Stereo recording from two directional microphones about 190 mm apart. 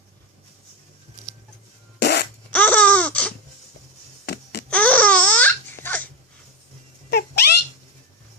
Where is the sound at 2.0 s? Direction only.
60° left (ahead or behind).